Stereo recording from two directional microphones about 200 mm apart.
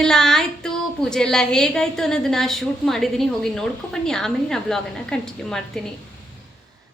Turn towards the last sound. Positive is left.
turn(degrees=5)  # may be behind; listen again after turning